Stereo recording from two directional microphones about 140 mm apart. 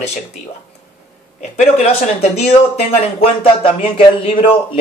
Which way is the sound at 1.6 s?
50° left (ahead or behind).